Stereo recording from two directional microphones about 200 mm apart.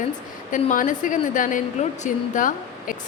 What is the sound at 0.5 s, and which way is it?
A woman's voice, 40° left (ahead or behind).